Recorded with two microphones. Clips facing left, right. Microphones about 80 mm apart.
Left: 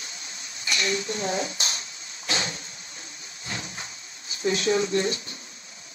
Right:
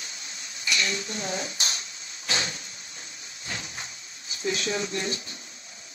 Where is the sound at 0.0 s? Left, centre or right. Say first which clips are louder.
Even; left.